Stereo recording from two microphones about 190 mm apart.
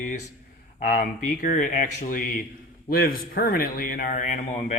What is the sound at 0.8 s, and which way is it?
Speech, 45° left (ahead or behind).